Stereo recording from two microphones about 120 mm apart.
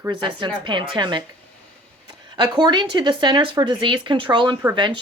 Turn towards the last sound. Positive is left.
turn(degrees=-40)  # may be behind; listen again after turning